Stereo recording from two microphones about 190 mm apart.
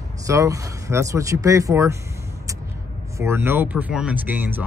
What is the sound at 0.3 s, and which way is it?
Speech, 15° right (ahead or behind).